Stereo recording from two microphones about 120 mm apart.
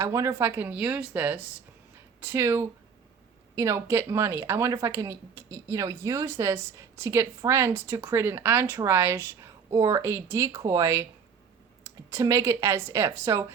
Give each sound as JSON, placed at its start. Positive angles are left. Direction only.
{"t": 0.0, "sound": "a woman's voice", "side_deg": -25}